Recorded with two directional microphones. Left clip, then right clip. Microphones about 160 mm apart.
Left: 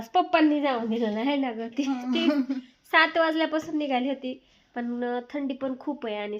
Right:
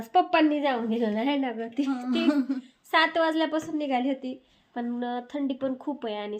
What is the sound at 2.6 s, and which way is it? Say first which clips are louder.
A woman's voice: left 3 dB; 20° left (ahead or behind).